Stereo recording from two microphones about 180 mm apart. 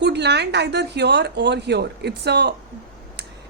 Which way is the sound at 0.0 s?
70° right (ahead or behind).